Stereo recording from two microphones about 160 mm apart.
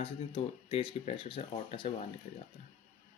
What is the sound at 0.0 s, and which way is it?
Speech, 35° left (ahead or behind).